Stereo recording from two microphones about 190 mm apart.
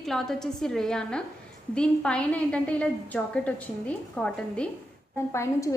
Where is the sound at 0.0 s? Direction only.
Centre (ahead or behind).